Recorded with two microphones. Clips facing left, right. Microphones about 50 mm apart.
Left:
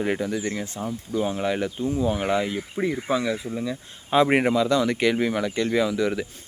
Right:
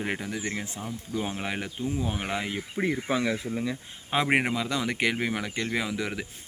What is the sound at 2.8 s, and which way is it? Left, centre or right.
Speech, right.